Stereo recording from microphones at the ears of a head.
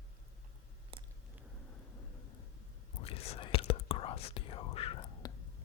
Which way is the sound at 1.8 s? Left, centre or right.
Left.